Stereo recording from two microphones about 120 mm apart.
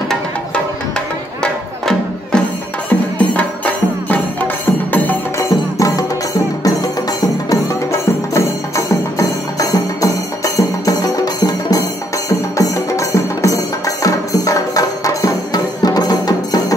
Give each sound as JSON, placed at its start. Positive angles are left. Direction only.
{"t": 0.9, "sound": "music", "side_deg": 5}
{"t": 5.4, "sound": "music", "side_deg": 25}